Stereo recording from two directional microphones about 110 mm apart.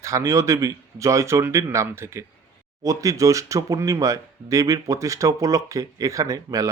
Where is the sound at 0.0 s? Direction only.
30° right (ahead or behind).